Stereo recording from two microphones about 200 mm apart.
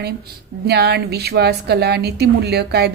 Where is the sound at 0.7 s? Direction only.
55° right (ahead or behind).